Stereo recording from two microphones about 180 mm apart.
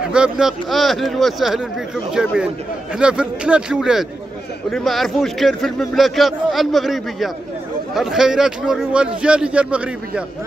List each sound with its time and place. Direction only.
0.1 s a man's voice: 5° right (ahead or behind)